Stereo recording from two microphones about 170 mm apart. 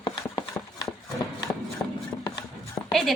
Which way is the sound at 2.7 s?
Centre (ahead or behind).